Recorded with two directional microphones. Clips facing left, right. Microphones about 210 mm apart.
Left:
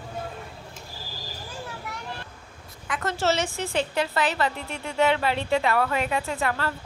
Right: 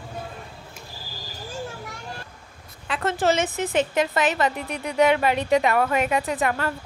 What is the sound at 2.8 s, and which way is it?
A woman's voice, 25° right (ahead or behind).